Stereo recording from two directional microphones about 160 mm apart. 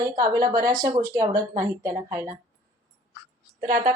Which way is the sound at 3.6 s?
60° right (ahead or behind).